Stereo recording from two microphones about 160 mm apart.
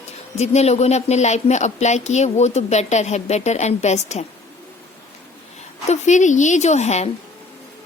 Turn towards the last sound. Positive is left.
turn(degrees=45)  # may be behind; listen again after turning